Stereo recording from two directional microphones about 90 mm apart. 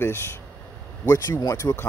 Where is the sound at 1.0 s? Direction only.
40° left (ahead or behind).